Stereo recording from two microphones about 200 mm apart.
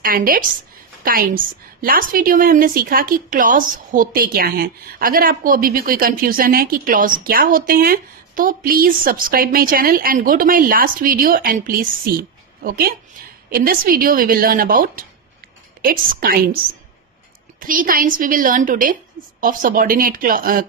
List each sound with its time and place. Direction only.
0.0 s a woman's voice: 45° right (ahead or behind)
17.6 s a woman's voice: 45° right (ahead or behind)